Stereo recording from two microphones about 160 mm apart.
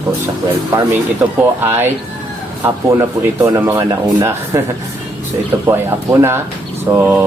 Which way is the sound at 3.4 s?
20° right (ahead or behind).